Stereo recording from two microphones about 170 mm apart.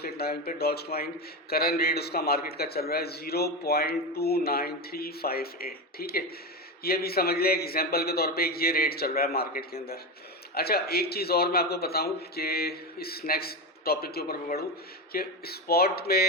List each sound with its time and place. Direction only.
0.0 s a man's voice: 65° left (ahead or behind)